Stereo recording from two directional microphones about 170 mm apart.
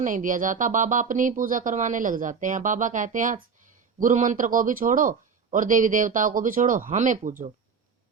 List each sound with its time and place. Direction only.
0.0 s speech: 50° right (ahead or behind)